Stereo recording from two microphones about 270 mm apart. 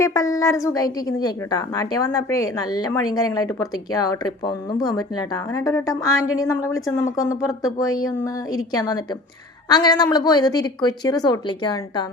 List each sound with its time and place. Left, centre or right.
0.0 s a woman's voice: centre